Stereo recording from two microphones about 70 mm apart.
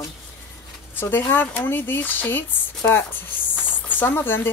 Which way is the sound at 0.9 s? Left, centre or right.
Left.